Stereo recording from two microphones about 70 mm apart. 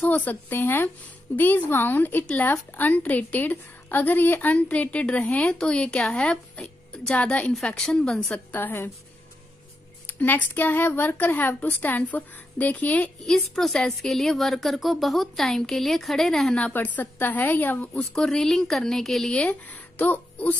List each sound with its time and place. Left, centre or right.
0.0 s a woman's voice: left; by 8.4 s centre
8.5 s a woman's voice: left
10.0 s a woman's voice: left
13.2 s a woman's voice: centre
16.5 s a woman's voice: left
18.1 s speech: centre
19.3 s speech: centre